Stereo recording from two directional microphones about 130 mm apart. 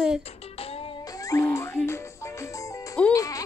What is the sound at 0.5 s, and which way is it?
Music, 50° left (ahead or behind).